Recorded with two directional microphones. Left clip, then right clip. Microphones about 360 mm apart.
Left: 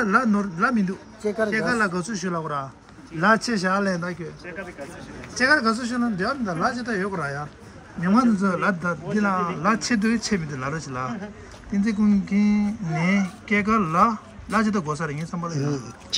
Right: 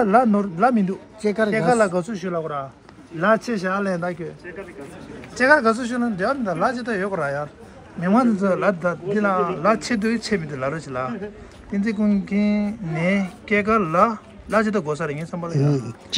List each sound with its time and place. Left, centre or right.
0.0 s speech: centre
5.3 s speech: centre
15.5 s speech: centre